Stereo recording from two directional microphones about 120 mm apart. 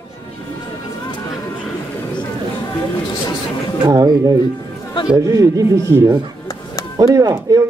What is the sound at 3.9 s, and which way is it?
A man's voice, 30° right (ahead or behind).